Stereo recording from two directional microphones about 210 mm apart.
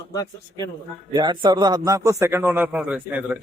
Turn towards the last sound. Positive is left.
turn(degrees=-5)  # may be behind; listen again after turning